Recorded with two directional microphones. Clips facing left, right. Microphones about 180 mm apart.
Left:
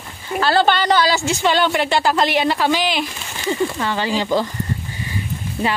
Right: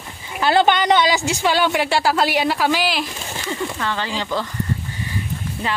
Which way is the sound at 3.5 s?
10° left (ahead or behind).